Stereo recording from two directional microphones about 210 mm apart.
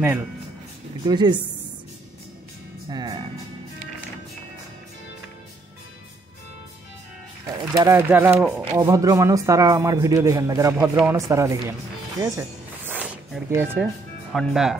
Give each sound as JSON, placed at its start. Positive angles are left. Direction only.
{"t": 1.0, "sound": "a woman's voice", "side_deg": -20}
{"t": 2.9, "sound": "a woman's voice", "side_deg": -20}
{"t": 7.4, "sound": "speech", "side_deg": -15}
{"t": 12.2, "sound": "music", "side_deg": -10}
{"t": 14.3, "sound": "speech", "side_deg": 0}